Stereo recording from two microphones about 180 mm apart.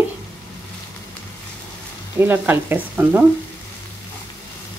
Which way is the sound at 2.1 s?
10° right (ahead or behind).